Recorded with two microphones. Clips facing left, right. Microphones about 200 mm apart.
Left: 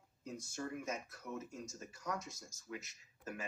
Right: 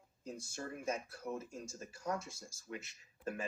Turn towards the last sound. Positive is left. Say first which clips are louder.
# right 5 dB
turn(degrees=-30)  # may be behind; listen again after turning